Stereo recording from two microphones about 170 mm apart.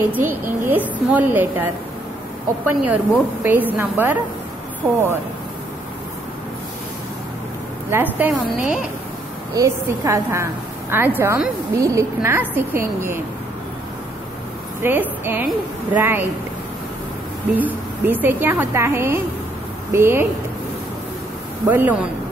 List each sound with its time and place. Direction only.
0.1 s a woman's voice: 10° right (ahead or behind)
7.9 s a woman's voice: 10° right (ahead or behind)
14.8 s a woman's voice: 10° right (ahead or behind)
17.6 s a woman's voice: 10° right (ahead or behind)
21.6 s a woman's voice: 10° right (ahead or behind)